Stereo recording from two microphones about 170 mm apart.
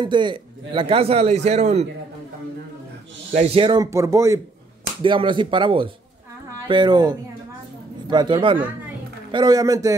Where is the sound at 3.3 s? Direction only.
35° right (ahead or behind); by 4.3 s 15° right (ahead or behind).